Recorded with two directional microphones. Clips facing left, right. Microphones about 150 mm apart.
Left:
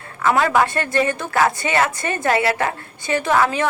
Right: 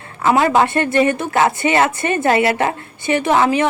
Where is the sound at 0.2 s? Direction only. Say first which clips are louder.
Right 3 dB; 25° right (ahead or behind).